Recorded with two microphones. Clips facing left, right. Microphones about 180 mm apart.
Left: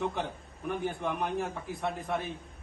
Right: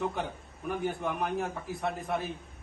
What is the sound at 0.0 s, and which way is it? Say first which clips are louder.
A man's voice: even; centre (ahead or behind).